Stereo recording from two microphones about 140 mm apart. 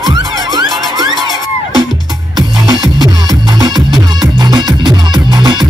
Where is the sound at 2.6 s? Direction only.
30° right (ahead or behind).